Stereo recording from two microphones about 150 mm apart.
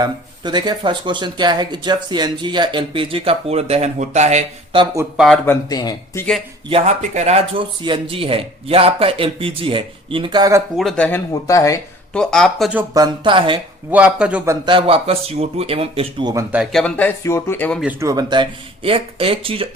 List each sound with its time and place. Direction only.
0.0 s speech: 30° right (ahead or behind); by 4.4 s 50° right (ahead or behind)
5.1 s speech: centre (ahead or behind)
5.6 s speech: 25° left (ahead or behind)
6.7 s speech: 35° right (ahead or behind)
7.1 s speech: 50° right (ahead or behind); by 10.6 s 25° right (ahead or behind)
10.8 s speech: 5° left (ahead or behind)
11.4 s speech: 20° left (ahead or behind)
12.1 s speech: 5° left (ahead or behind)
12.9 s speech: 30° right (ahead or behind)
13.9 s speech: 10° right (ahead or behind)
14.4 s speech: 20° right (ahead or behind)
14.7 s speech: 35° right (ahead or behind)
16.7 s speech: 10° left (ahead or behind)
18.0 s speech: 25° right (ahead or behind)